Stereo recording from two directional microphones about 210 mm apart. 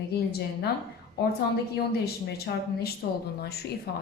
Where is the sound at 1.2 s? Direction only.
50° left (ahead or behind).